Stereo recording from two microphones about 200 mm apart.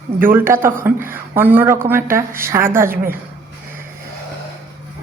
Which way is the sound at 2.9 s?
45° right (ahead or behind).